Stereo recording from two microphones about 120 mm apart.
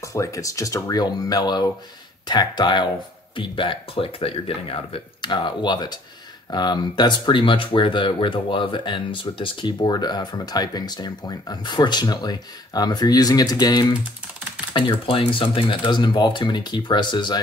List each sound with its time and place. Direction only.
0.0 s speech: 25° left (ahead or behind)